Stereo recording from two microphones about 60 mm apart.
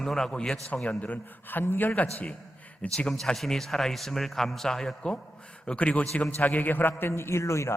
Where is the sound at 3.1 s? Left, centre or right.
Centre; by 6.9 s left.